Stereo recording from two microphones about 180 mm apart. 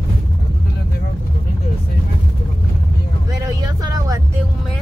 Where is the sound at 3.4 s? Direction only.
20° right (ahead or behind).